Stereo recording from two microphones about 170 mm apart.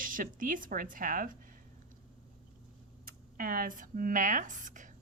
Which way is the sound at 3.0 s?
60° right (ahead or behind).